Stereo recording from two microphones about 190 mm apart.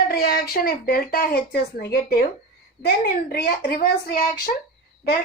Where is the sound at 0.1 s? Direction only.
55° left (ahead or behind).